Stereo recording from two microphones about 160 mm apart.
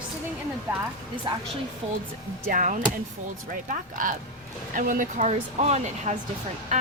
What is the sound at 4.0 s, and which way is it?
Speech, 55° right (ahead or behind).